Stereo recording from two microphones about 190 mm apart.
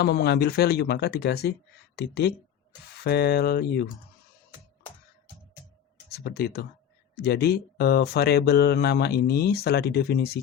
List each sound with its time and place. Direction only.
0.0 s speech: 60° left (ahead or behind)
6.1 s speech: 55° left (ahead or behind)